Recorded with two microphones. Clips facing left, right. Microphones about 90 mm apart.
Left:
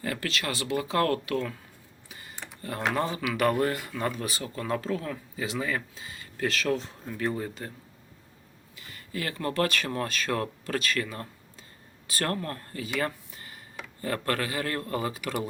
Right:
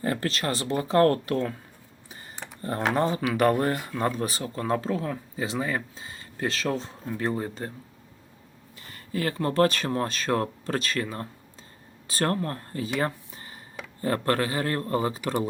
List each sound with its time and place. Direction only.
0.0 s speech: 35° right (ahead or behind)
2.0 s tick: 35° right (ahead or behind)
2.6 s speech: 35° right (ahead or behind)
8.8 s speech: 35° right (ahead or behind)